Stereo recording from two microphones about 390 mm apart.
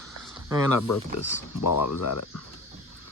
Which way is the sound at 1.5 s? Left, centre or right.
Left.